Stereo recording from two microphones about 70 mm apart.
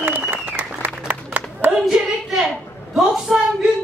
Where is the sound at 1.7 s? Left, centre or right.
Centre.